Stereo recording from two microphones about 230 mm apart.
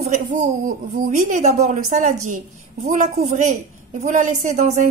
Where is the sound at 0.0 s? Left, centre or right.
Right.